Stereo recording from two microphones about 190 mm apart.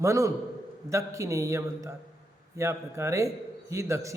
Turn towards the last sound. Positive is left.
turn(degrees=-15)  # may be behind; listen again after turning